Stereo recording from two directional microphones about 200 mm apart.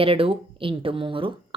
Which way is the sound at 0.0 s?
25° right (ahead or behind).